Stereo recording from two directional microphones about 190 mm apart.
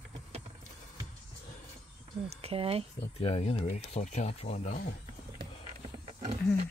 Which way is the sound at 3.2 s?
30° left (ahead or behind).